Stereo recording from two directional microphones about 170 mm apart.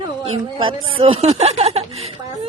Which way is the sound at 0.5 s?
30° right (ahead or behind).